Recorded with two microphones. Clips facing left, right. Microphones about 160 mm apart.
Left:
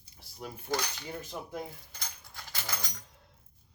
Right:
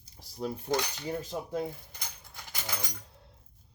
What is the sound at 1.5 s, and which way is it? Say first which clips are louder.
Keys jangling: right 6 dB; 20° right (ahead or behind).